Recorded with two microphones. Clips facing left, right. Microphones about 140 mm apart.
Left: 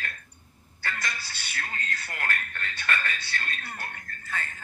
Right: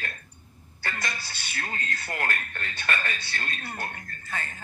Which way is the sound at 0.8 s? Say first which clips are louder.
Right 1 dB; 25° right (ahead or behind).